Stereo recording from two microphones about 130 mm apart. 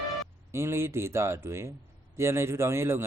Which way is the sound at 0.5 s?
20° right (ahead or behind).